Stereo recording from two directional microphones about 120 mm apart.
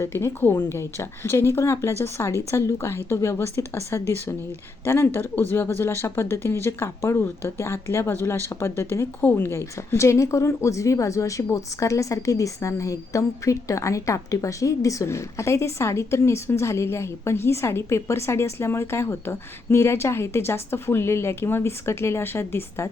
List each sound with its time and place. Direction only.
0.0 s speech: 25° left (ahead or behind)